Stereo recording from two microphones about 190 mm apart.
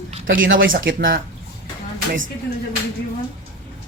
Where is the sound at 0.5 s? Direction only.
50° right (ahead or behind).